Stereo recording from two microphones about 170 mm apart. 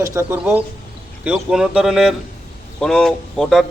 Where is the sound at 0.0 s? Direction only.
15° right (ahead or behind).